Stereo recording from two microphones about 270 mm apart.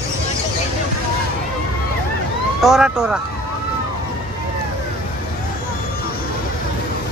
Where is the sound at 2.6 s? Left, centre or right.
Centre.